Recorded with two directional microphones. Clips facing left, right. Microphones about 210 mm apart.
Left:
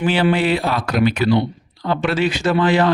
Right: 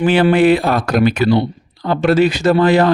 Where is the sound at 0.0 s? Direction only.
50° right (ahead or behind).